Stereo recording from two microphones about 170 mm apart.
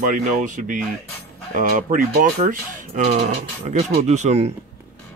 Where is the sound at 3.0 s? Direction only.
40° right (ahead or behind).